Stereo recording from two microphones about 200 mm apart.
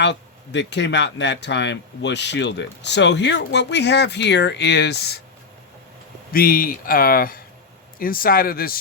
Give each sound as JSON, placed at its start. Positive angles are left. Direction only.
{"t": 0.0, "sound": "speech", "side_deg": 60}
{"t": 6.3, "sound": "speech", "side_deg": 50}